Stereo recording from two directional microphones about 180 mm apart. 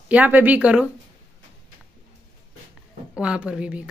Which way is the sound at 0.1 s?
10° right (ahead or behind).